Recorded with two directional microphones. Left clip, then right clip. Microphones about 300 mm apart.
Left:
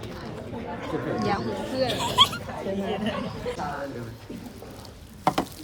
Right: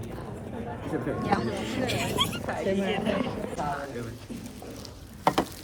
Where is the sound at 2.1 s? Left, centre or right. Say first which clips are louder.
Left 13 dB; left.